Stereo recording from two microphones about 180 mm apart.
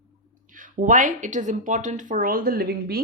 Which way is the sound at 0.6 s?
45° right (ahead or behind).